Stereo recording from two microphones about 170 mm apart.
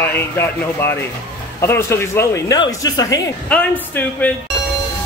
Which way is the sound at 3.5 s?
10° left (ahead or behind).